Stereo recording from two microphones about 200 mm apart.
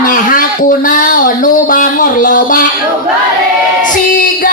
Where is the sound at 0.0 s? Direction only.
45° left (ahead or behind).